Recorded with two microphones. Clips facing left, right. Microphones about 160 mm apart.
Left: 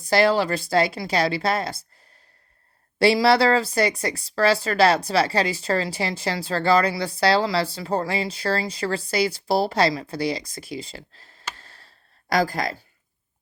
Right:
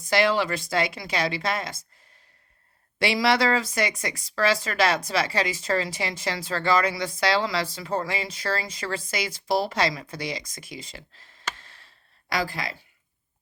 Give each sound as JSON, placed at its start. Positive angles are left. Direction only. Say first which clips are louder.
{"t": 0.0, "sound": "a woman's voice", "louder": "left 3 dB", "side_deg": 35}
{"t": 3.0, "sound": "a woman's voice", "louder": "left 5 dB", "side_deg": 35}